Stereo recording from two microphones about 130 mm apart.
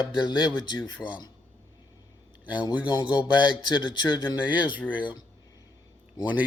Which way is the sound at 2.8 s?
35° left (ahead or behind).